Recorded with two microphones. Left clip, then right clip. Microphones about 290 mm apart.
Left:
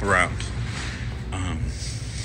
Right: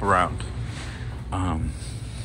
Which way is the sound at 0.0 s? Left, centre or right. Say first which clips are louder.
Even; centre.